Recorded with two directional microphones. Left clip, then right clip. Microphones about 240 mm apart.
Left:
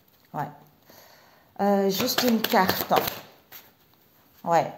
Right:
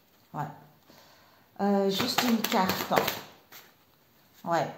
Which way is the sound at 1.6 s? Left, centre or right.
Left.